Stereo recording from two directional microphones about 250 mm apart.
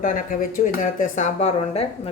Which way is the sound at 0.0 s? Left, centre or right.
Left.